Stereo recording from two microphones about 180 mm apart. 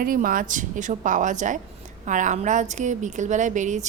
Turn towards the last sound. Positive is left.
turn(degrees=-45)  # may be behind; listen again after turning